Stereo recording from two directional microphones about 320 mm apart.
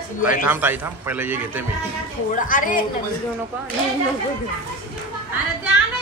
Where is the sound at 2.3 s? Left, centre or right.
Left.